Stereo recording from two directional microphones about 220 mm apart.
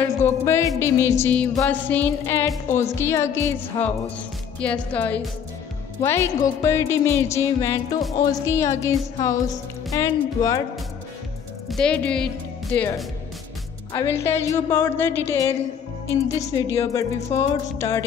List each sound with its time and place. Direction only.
0.2 s music: 15° left (ahead or behind)
4.6 s a woman's voice: 5° left (ahead or behind)
6.0 s music: 10° left (ahead or behind)
11.7 s a woman's voice: 5° left (ahead or behind)
12.7 s music: 10° left (ahead or behind)